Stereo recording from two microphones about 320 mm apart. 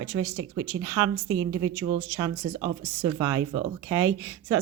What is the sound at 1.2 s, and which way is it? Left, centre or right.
Speech, right.